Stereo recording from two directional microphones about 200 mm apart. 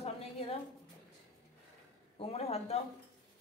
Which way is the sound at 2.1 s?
30° left (ahead or behind).